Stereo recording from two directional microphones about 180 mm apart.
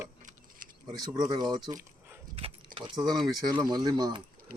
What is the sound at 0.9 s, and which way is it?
Speech, 20° right (ahead or behind).